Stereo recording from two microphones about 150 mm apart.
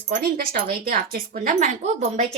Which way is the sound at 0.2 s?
80° right.